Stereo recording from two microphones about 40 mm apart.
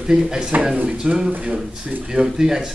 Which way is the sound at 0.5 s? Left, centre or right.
Right.